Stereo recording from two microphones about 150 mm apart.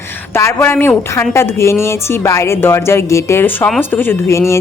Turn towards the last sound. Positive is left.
turn(degrees=20)  # may be behind; listen again after turning